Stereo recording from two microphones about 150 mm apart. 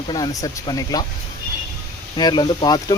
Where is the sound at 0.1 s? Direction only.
25° left (ahead or behind).